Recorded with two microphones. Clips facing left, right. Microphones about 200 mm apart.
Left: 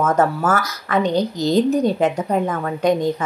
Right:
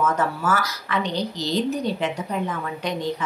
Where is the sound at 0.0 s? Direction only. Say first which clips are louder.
Left 5 dB; 45° left (ahead or behind).